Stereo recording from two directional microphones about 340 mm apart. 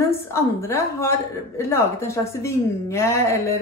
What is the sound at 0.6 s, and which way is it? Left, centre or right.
A woman's voice, centre.